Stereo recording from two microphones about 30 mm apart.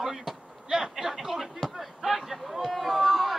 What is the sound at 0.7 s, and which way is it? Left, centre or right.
Speech, centre.